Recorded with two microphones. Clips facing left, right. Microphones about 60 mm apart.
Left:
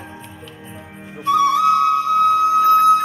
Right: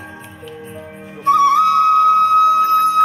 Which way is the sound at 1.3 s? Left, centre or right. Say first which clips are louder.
Right 3 dB; right.